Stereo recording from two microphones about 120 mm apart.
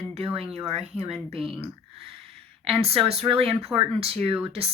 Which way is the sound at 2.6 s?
50° right (ahead or behind).